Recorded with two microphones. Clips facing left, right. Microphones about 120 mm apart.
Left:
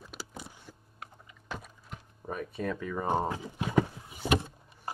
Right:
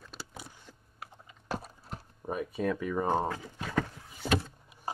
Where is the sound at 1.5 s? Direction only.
40° right (ahead or behind).